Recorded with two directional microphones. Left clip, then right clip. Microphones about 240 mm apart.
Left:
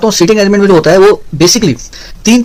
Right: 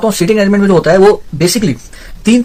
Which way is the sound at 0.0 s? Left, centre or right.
Left.